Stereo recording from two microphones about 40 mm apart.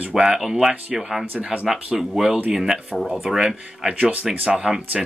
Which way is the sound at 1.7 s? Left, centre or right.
Centre.